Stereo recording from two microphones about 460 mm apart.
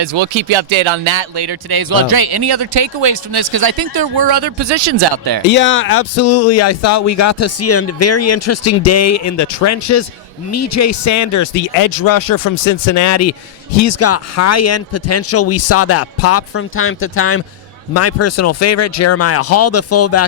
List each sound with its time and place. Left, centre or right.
0.0 s speech: right
3.4 s speech: right
5.5 s speech: left